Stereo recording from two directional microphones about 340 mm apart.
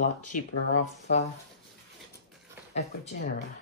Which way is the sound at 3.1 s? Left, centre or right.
Left.